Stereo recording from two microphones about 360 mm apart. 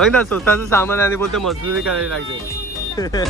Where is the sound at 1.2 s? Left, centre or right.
Right.